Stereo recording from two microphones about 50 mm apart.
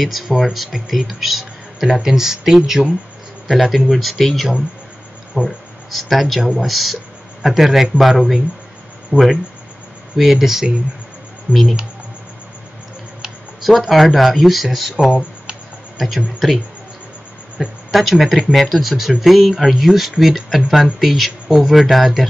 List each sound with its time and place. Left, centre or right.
0.0 s speech: centre
5.4 s speech: left
5.9 s speech: centre
11.5 s speech: right
13.6 s speech: centre
16.4 s speech: centre